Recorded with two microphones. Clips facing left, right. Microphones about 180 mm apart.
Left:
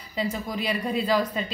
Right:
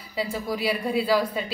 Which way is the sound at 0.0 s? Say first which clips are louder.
Even; 5° right (ahead or behind).